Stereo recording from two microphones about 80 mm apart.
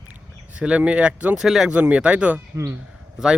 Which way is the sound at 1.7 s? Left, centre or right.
Centre.